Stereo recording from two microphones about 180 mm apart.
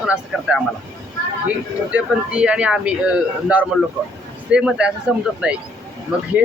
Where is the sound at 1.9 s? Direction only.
5° right (ahead or behind).